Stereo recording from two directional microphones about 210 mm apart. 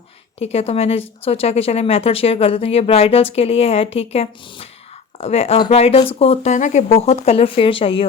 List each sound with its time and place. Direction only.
0.3 s a woman's voice: 30° left (ahead or behind)